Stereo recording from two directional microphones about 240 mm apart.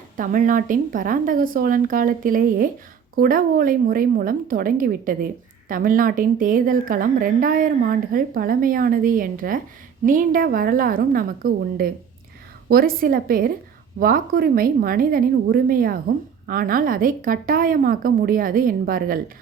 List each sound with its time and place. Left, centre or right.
0.2 s a woman's voice: right